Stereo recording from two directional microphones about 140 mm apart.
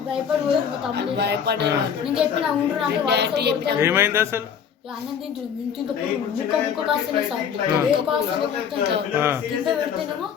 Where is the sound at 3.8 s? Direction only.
15° right (ahead or behind).